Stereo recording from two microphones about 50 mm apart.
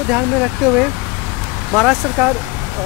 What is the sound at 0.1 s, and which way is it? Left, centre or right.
Speech, right.